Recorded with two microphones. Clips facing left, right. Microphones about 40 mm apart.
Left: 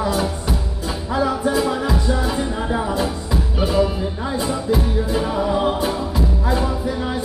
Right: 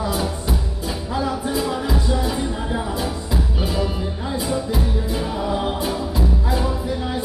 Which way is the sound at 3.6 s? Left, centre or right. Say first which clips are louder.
Left 8 dB; centre.